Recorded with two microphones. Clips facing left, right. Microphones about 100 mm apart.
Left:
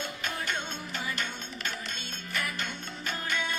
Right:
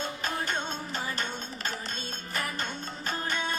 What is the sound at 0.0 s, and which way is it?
Music, 35° right (ahead or behind).